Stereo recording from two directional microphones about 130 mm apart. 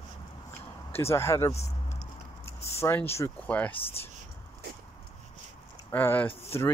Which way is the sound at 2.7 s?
15° left (ahead or behind).